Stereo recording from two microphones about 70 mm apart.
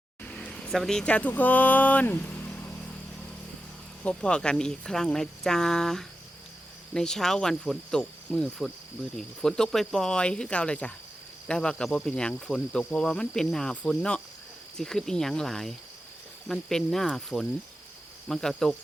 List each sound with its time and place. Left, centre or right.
0.3 s a sound: centre
0.6 s speech: centre; by 2.7 s left
4.0 s speech: centre
8.3 s cricket: centre
9.1 s speech: centre